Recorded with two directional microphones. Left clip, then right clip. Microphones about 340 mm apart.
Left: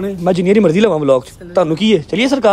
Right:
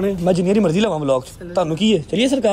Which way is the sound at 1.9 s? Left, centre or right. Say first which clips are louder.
Left 4 dB; left.